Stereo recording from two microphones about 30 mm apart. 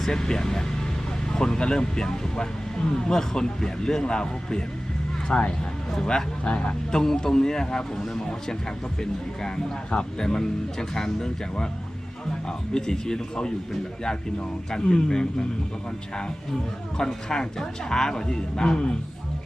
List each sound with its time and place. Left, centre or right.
0.1 s speech: left
6.9 s speech: centre
12.5 s speech: left
14.7 s speech: left
17.0 s speech: centre